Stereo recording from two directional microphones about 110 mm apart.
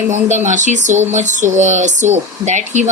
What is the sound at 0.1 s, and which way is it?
Speech, 90° right.